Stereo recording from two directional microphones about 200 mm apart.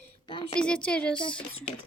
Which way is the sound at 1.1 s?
25° left (ahead or behind).